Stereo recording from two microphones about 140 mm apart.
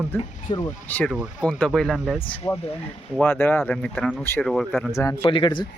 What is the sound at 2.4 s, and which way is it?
Speech, 40° left (ahead or behind).